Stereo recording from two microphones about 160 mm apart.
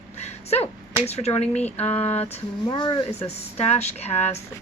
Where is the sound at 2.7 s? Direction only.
30° left (ahead or behind).